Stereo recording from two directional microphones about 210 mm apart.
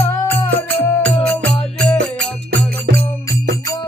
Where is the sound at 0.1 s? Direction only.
10° left (ahead or behind).